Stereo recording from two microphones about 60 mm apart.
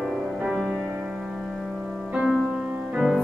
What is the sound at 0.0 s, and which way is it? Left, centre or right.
Music, centre.